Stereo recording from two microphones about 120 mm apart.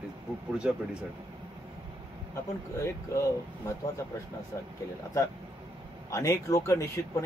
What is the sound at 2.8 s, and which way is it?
Speech, 25° left (ahead or behind).